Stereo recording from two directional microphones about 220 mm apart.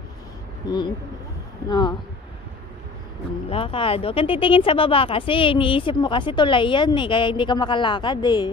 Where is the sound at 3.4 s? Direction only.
25° left (ahead or behind).